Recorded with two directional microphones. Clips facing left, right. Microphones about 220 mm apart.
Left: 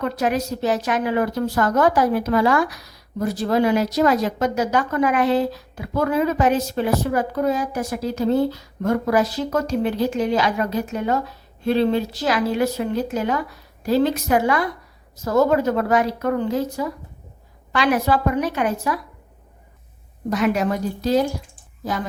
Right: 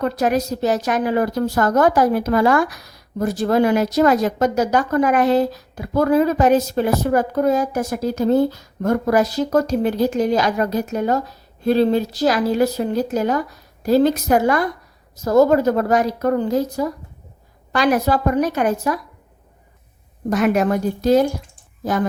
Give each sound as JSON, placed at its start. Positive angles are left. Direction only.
{"t": 0.0, "sound": "a woman's voice", "side_deg": -40}
{"t": 20.3, "sound": "a woman's voice", "side_deg": -50}